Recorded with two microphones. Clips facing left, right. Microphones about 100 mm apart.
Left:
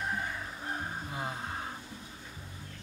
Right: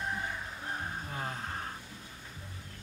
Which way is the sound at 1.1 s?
10° left (ahead or behind).